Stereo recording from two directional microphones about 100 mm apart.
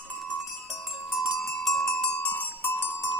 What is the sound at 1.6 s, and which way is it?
Music, 5° left (ahead or behind).